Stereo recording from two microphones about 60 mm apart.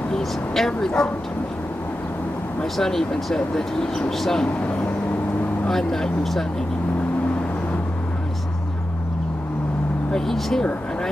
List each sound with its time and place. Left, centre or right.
0.1 s bow-wow: centre
2.6 s speech: centre
4.6 s speech: left
5.7 s speech: centre
10.1 s speech: centre